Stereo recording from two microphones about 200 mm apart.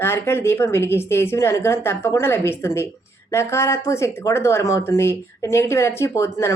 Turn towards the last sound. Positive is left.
turn(degrees=15)  # may be behind; listen again after turning